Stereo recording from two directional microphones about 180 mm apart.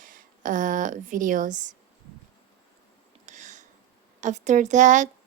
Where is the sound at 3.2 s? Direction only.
40° right (ahead or behind).